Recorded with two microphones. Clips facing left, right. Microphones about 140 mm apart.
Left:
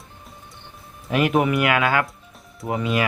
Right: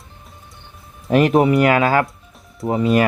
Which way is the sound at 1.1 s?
35° right (ahead or behind).